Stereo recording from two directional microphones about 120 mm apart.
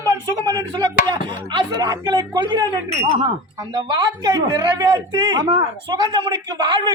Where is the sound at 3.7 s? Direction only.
40° right (ahead or behind).